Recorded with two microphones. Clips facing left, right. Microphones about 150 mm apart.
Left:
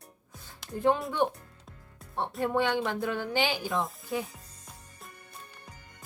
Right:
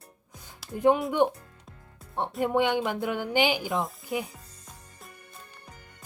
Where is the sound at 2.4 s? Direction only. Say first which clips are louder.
Right 3 dB; 15° right (ahead or behind).